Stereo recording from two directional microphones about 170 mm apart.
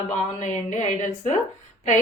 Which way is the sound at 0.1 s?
45° left (ahead or behind).